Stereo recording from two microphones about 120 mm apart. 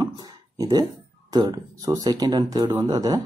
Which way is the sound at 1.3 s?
30° right (ahead or behind).